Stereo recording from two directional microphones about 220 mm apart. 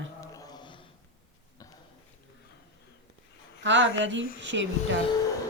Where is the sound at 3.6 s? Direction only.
55° right (ahead or behind).